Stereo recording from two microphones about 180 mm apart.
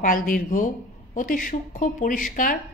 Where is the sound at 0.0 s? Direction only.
50° left (ahead or behind).